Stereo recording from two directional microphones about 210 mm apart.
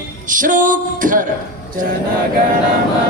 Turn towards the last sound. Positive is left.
turn(degrees=-40)  # may be behind; listen again after turning